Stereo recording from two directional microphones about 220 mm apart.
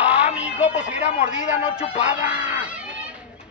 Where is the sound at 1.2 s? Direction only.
25° left (ahead or behind).